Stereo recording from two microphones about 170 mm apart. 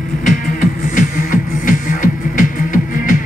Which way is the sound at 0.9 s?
50° left (ahead or behind).